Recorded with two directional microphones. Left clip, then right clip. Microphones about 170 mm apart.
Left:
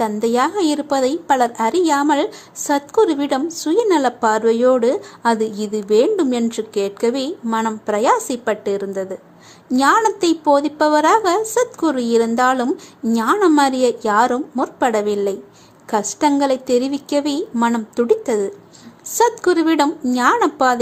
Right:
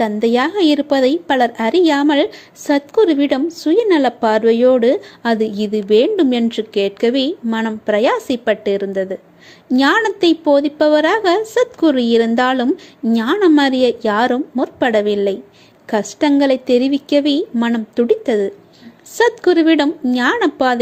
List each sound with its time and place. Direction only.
0.0 s a woman's voice: 30° right (ahead or behind)